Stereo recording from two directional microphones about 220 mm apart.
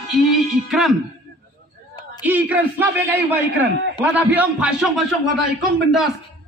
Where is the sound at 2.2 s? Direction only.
5° right (ahead or behind).